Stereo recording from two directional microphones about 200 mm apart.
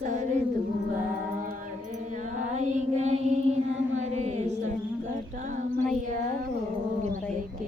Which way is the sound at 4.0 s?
35° right (ahead or behind).